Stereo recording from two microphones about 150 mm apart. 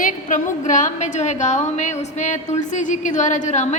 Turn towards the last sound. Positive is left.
turn(degrees=50)  # may be behind; listen again after turning